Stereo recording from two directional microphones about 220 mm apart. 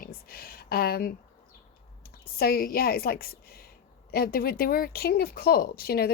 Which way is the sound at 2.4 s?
40° left (ahead or behind).